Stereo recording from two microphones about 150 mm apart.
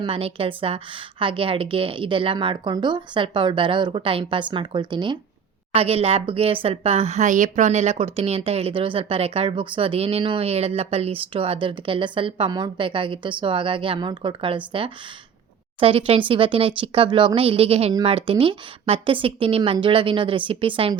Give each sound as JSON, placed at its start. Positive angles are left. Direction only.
{"t": 0.0, "sound": "speech", "side_deg": -40}